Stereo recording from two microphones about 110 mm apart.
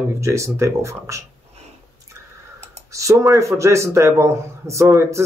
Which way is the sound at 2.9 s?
30° right (ahead or behind).